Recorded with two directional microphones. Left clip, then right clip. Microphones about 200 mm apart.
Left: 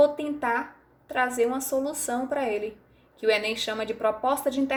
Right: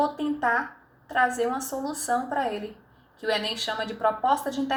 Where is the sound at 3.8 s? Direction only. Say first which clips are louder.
Right 3 dB; 50° left (ahead or behind).